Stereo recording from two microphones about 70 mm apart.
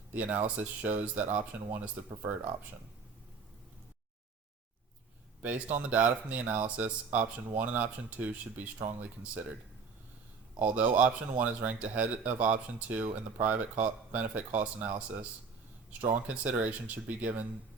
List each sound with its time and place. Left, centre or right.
0.1 s speech: right
5.4 s speech: right
10.6 s speech: right